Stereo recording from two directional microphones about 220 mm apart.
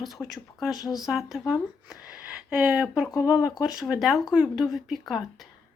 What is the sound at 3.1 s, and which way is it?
Speech, 15° left (ahead or behind).